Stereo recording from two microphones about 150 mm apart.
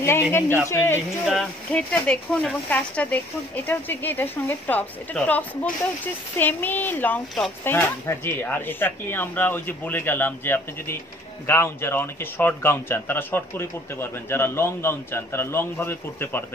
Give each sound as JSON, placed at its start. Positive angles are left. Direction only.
{"t": 0.0, "sound": "speech", "side_deg": 15}
{"t": 1.2, "sound": "speech", "side_deg": 0}